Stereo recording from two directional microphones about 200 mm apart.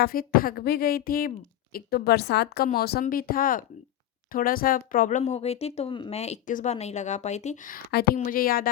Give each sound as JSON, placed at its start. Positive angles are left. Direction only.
{"t": 0.0, "sound": "speech", "side_deg": 45}